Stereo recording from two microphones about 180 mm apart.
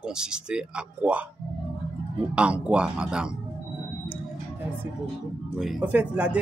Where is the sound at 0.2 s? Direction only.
5° right (ahead or behind).